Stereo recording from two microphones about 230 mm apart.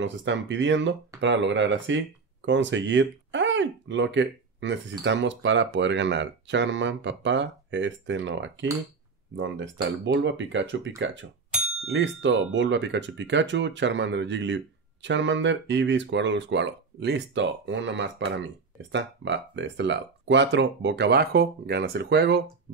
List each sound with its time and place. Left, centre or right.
0.0 s speech: right
11.9 s speech: right